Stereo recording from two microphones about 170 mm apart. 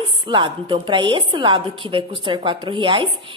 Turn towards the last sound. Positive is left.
turn(degrees=-30)  # may be behind; listen again after turning